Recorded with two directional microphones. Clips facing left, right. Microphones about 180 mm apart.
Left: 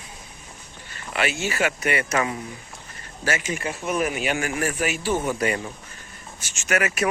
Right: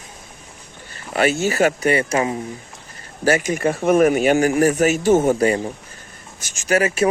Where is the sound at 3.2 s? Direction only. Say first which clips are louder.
Right 9 dB; 40° right (ahead or behind).